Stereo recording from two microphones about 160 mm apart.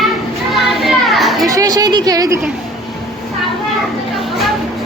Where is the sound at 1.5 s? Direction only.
20° right (ahead or behind).